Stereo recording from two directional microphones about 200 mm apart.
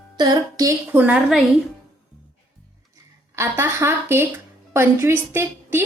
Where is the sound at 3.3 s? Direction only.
15° right (ahead or behind).